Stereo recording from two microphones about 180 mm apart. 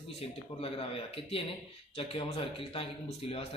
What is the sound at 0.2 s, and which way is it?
A man's voice, 30° left (ahead or behind).